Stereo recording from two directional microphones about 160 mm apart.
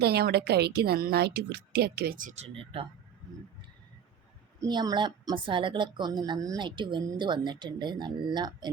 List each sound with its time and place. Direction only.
0.0 s a woman's voice: 90° right; by 2.8 s 35° right (ahead or behind)
4.6 s speech: 25° right (ahead or behind)